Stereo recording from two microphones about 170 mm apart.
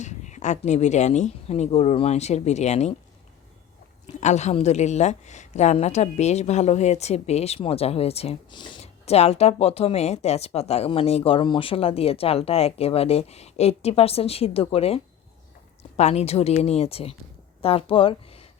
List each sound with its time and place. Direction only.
0.0 s speech: 45° left (ahead or behind)
4.0 s speech: 40° left (ahead or behind); by 8.8 s 25° left (ahead or behind)
8.8 s speech: 40° left (ahead or behind)